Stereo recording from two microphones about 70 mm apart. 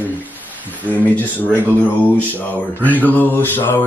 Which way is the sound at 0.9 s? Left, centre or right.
Left.